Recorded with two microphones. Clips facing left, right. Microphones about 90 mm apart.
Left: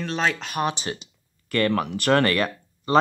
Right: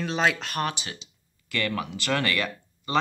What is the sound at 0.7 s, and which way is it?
Speech, 35° left (ahead or behind).